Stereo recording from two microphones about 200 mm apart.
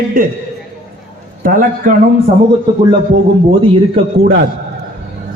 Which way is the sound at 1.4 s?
40° right (ahead or behind).